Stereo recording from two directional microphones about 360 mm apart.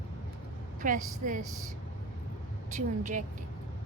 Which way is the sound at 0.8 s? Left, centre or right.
Right.